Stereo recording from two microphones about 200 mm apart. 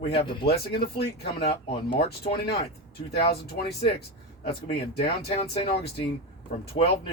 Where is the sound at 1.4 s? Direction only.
30° left (ahead or behind).